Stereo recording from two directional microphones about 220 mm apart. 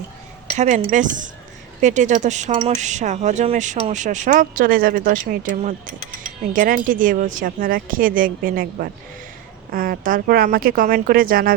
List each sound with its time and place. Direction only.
0.5 s a woman's voice: 30° right (ahead or behind)